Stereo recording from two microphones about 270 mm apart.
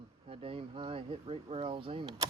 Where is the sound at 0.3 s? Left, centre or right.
Centre.